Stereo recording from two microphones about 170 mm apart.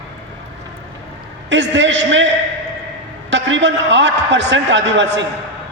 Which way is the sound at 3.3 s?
90° right.